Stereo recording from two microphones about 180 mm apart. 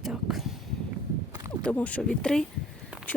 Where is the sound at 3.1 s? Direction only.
10° left (ahead or behind).